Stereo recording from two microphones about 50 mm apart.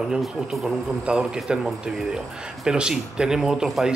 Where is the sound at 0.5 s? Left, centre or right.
Centre.